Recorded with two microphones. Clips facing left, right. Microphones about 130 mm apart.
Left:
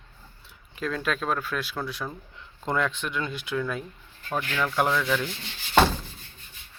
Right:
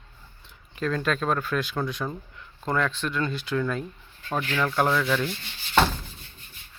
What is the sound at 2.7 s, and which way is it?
Speech, 15° left (ahead or behind).